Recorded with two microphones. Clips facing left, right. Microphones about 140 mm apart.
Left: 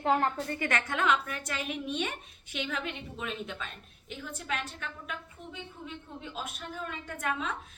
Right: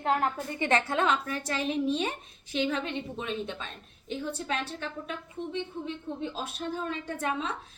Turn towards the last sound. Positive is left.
turn(degrees=-30)  # may be behind; listen again after turning